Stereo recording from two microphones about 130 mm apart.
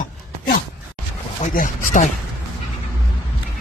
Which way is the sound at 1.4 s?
90° left.